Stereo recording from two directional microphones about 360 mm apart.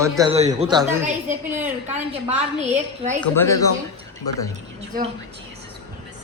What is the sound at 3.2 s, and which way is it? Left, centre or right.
Speech, centre.